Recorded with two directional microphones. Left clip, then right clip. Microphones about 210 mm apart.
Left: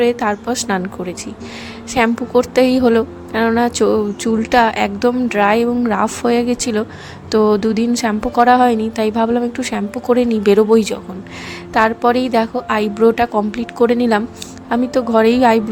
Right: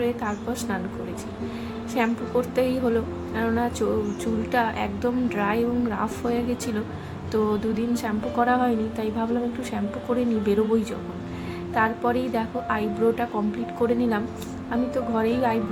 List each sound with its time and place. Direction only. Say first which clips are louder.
0.0 s a woman's voice: left 11 dB; 45° left (ahead or behind)
1.9 s a woman's voice: left 10 dB; 45° left (ahead or behind)